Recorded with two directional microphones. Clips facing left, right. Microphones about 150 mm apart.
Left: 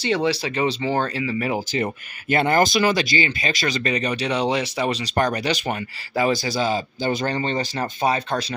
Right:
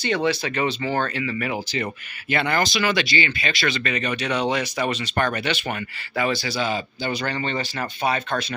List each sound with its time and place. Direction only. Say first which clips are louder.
0.1 s speech: left 1 dB; 30° left (ahead or behind)